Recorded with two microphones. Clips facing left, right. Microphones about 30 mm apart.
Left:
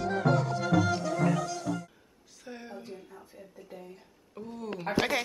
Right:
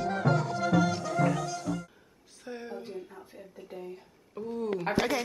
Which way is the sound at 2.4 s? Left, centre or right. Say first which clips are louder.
Right 4 dB; centre.